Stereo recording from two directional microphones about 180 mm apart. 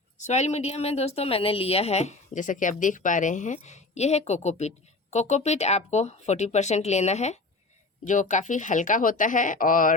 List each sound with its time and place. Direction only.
0.2 s a woman's voice: 40° left (ahead or behind)